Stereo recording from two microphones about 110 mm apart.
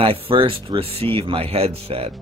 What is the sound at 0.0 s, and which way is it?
Speech, 55° right (ahead or behind).